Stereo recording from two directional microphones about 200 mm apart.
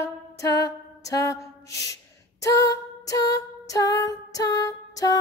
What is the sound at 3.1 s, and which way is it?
Music, 15° left (ahead or behind).